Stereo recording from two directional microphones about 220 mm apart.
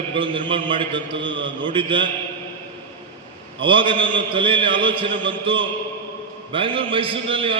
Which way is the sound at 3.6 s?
25° right (ahead or behind).